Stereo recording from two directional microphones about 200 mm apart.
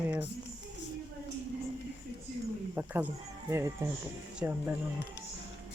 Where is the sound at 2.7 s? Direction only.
10° right (ahead or behind).